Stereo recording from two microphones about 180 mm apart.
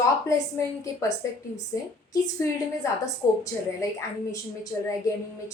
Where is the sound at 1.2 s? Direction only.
15° left (ahead or behind).